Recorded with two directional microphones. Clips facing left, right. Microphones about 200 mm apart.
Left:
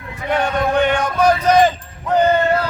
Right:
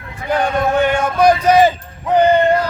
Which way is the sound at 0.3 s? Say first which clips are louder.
Right 2 dB; 5° right (ahead or behind).